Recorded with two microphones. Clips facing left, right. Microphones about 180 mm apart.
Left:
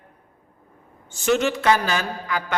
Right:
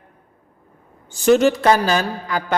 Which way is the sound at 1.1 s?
35° right (ahead or behind).